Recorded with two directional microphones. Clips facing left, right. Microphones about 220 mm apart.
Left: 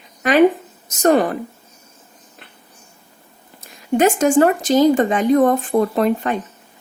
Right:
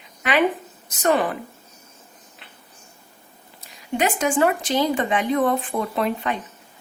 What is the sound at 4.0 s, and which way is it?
Speech, 45° left (ahead or behind).